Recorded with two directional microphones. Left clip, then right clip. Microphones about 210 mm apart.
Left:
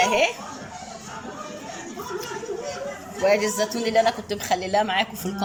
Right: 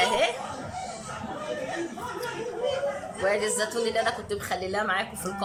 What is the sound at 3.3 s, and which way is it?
A woman's voice, 15° left (ahead or behind).